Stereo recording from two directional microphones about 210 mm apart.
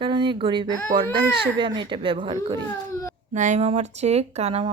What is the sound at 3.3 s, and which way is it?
Speech, 35° right (ahead or behind).